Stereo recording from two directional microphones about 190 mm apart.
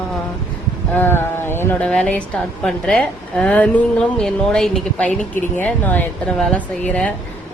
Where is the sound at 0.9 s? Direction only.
10° left (ahead or behind).